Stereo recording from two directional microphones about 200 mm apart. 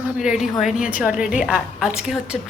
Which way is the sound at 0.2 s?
Centre (ahead or behind).